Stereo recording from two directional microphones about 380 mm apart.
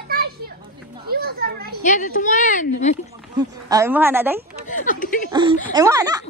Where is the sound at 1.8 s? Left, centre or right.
Centre.